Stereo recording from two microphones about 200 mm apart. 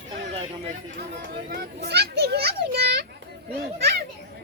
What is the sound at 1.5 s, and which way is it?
Children playing, 55° right (ahead or behind).